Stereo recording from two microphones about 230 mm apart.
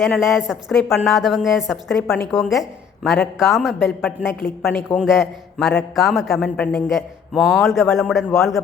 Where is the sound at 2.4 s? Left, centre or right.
Centre.